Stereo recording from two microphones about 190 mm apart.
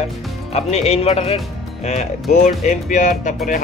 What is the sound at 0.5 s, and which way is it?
Speech, 35° left (ahead or behind).